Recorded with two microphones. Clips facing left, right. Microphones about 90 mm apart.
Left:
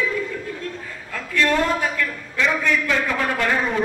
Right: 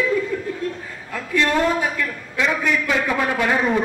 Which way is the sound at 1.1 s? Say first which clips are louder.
Right 1 dB; 15° right (ahead or behind).